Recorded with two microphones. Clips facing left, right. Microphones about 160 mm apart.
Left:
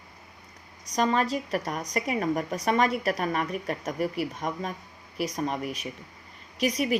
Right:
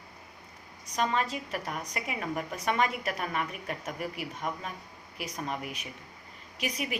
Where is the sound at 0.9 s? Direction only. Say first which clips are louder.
Left 5 dB; 40° left (ahead or behind).